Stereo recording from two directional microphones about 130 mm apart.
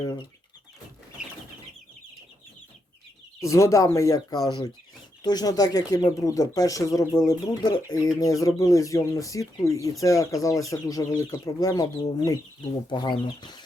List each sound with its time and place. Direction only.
0.0 s speech: 35° left (ahead or behind)
1.2 s a sound: 5° right (ahead or behind)
3.4 s speech: 25° left (ahead or behind)